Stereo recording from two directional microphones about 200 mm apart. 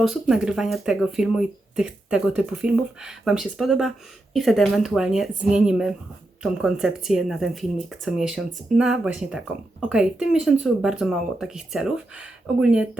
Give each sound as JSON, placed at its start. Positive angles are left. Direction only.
{"t": 0.0, "sound": "speech", "side_deg": 0}